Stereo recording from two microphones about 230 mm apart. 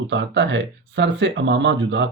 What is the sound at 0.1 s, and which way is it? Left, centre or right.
Speech, right.